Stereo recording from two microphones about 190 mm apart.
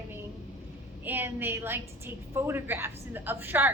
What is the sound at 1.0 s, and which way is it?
A woman's voice, 10° right (ahead or behind).